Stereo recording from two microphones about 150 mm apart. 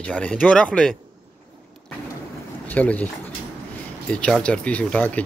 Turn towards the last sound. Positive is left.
turn(degrees=10)  # may be behind; listen again after turning